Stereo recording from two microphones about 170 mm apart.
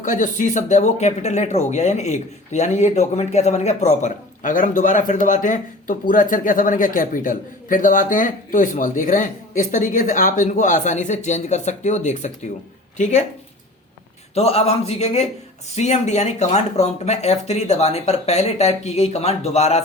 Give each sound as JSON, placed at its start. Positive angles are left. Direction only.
{"t": 0.0, "sound": "speech", "side_deg": 50}
{"t": 4.0, "sound": "speech", "side_deg": 50}
{"t": 14.3, "sound": "speech", "side_deg": 40}